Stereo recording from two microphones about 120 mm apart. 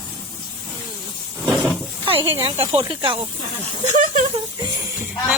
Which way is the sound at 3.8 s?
80° right.